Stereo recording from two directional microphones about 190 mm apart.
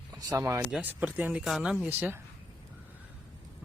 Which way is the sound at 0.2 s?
20° right (ahead or behind).